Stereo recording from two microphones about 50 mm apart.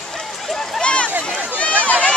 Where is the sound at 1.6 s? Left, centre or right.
Left.